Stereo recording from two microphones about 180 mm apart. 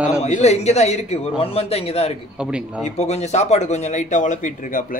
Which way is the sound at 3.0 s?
40° left (ahead or behind).